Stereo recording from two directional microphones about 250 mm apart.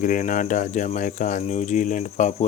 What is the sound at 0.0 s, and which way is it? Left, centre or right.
Speech, left.